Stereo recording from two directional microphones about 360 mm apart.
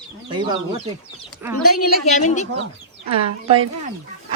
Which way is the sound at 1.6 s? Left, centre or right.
Left.